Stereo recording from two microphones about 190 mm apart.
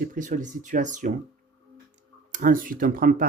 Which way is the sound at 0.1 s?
45° right (ahead or behind).